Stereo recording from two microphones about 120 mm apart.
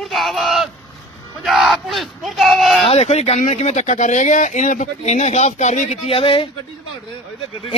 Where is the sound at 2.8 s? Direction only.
60° left (ahead or behind); by 6.0 s 75° left (ahead or behind).